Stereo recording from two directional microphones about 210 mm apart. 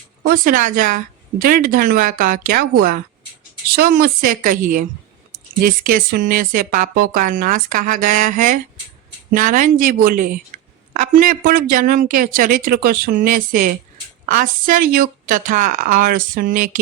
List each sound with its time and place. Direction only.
0.3 s speech: 40° right (ahead or behind)